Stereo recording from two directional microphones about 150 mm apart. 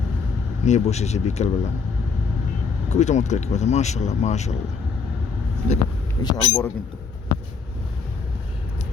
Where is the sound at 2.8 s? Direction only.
50° left (ahead or behind).